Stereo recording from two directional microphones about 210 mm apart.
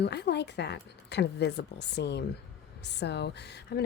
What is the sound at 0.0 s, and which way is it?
Speech, 55° left (ahead or behind).